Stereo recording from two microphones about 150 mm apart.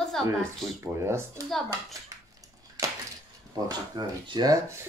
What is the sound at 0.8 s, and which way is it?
Speech, 15° right (ahead or behind).